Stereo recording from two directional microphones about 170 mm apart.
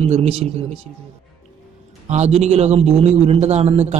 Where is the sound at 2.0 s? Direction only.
40° right (ahead or behind).